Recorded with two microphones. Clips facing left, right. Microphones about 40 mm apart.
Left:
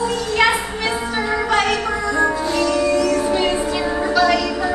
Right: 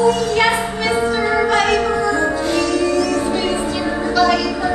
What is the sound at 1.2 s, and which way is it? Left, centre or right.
Music, centre.